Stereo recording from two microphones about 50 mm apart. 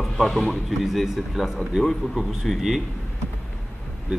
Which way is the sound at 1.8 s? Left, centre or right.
Centre.